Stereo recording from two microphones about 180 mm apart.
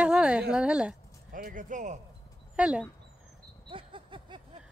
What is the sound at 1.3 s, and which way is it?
Speech, 50° right (ahead or behind).